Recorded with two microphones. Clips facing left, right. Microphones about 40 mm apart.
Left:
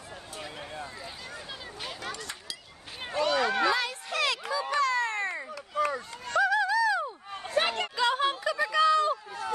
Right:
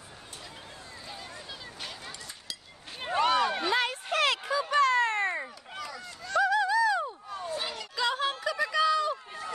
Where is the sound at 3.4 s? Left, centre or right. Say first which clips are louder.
Left 2 dB; left.